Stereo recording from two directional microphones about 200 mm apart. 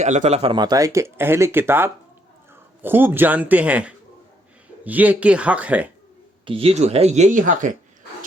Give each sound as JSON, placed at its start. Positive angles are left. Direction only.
{"t": 0.0, "sound": "speech", "side_deg": -35}
{"t": 6.4, "sound": "speech", "side_deg": -25}